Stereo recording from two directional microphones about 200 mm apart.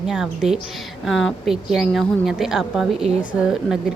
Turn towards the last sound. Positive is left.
turn(degrees=-5)  # may be behind; listen again after turning